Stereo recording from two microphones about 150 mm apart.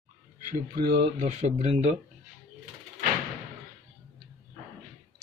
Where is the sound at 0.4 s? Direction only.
75° right (ahead or behind).